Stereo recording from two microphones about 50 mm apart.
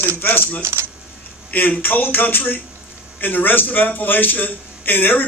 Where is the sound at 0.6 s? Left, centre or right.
Right.